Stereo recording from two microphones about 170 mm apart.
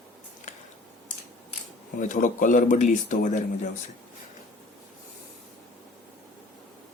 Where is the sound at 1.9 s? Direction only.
50° left (ahead or behind).